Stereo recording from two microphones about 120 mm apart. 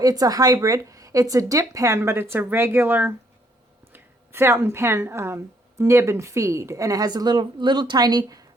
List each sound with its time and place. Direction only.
0.0 s speech: 30° right (ahead or behind)